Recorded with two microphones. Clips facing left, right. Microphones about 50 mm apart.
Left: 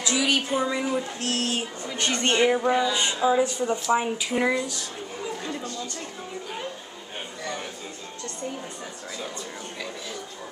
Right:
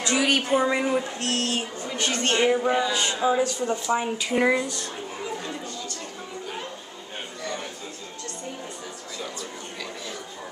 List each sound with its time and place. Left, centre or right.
0.0 s a woman's voice: right
1.2 s speech: centre
2.0 s a woman's voice: left
2.3 s speech: centre
2.9 s a woman's voice: left
3.9 s speech: centre
4.3 s speech: centre
5.4 s a sound: centre